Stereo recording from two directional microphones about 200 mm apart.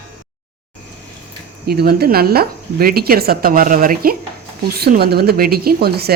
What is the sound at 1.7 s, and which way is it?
Speech, 50° right (ahead or behind).